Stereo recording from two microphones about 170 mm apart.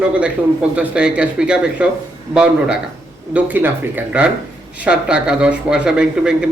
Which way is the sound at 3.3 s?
10° right (ahead or behind).